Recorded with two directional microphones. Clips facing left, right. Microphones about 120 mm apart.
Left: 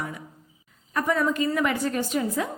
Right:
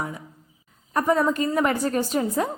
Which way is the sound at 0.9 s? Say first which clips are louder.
Right 3 dB; 35° right (ahead or behind).